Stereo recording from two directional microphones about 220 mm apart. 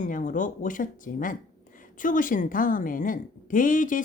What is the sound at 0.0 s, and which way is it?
A woman's voice, 35° left (ahead or behind).